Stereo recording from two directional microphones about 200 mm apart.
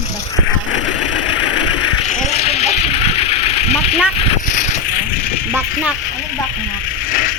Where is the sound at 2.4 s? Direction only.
30° left (ahead or behind).